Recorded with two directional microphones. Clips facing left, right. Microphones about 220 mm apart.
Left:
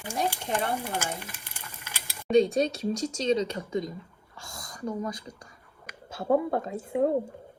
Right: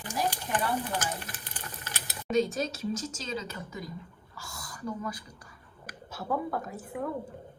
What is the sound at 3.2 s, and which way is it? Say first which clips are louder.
Speech: left 11 dB; 25° left (ahead or behind).